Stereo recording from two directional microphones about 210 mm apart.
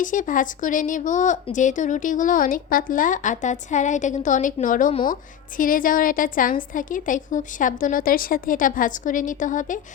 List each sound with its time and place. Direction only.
0.0 s speech: 40° left (ahead or behind)